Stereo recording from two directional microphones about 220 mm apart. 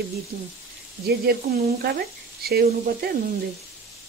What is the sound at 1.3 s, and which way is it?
Speech, 45° right (ahead or behind).